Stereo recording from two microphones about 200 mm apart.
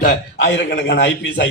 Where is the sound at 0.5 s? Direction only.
60° left (ahead or behind).